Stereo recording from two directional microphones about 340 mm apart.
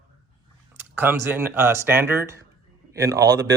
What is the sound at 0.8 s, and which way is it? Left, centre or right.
Speech, centre.